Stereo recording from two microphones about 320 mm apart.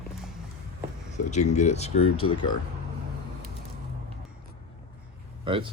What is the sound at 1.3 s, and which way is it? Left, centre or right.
Speech, left.